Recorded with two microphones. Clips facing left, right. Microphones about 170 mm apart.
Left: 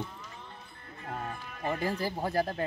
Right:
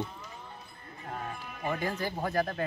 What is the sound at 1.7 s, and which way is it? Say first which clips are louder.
Speech: left 1 dB; 35° left (ahead or behind).